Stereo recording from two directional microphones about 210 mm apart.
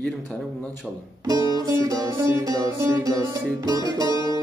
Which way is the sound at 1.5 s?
15° right (ahead or behind).